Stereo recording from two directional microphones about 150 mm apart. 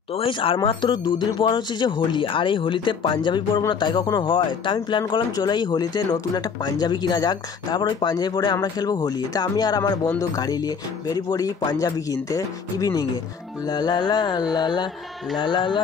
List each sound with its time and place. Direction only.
0.1 s speech: 35° left (ahead or behind)